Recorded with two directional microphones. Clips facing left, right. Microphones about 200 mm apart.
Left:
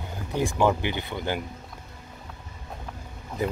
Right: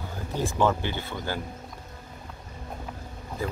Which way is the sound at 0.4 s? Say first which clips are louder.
Left 2 dB; 15° left (ahead or behind).